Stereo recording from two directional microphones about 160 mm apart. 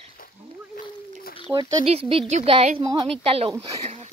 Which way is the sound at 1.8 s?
40° right (ahead or behind).